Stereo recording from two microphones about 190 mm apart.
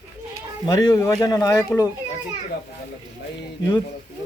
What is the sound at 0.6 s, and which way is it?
Speech, 20° left (ahead or behind).